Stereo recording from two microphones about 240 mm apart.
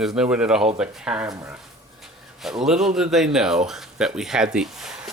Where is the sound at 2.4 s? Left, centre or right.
Centre.